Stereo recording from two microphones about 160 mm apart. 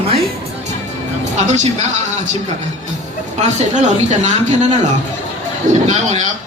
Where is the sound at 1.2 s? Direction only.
45° right (ahead or behind).